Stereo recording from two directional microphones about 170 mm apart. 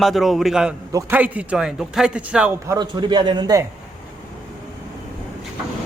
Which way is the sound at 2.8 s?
25° right (ahead or behind).